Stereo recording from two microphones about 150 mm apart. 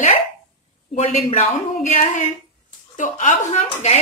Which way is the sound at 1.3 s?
50° left (ahead or behind).